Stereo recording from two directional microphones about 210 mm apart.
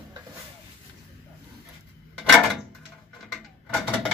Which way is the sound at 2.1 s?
Centre (ahead or behind).